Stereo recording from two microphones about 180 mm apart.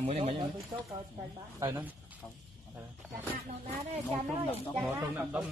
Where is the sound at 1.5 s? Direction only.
20° right (ahead or behind).